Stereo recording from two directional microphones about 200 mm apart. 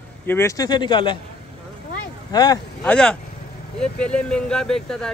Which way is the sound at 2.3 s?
20° left (ahead or behind).